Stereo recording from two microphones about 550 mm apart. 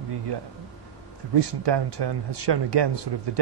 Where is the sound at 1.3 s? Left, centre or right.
Right.